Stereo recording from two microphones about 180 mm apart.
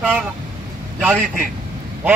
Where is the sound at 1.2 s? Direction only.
50° right (ahead or behind).